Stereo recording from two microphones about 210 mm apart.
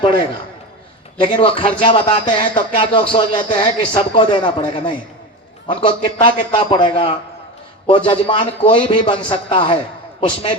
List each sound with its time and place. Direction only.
1.2 s speech: 25° left (ahead or behind)